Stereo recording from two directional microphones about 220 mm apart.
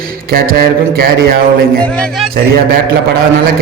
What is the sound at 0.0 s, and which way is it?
Mantra, 40° right (ahead or behind).